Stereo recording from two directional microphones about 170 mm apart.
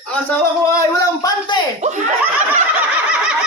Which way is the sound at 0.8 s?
20° left (ahead or behind).